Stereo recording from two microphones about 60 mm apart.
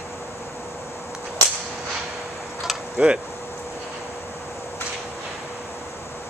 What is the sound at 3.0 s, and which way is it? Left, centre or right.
Speech, centre.